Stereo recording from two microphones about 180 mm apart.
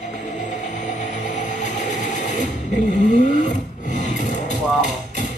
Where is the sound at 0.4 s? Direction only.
45° left (ahead or behind).